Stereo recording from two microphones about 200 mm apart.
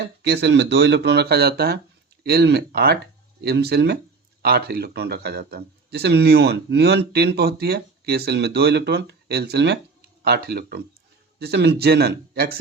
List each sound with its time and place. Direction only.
0.2 s speech: 55° right (ahead or behind)